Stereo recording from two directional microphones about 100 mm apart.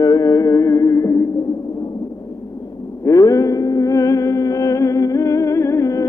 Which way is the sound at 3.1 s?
35° left (ahead or behind).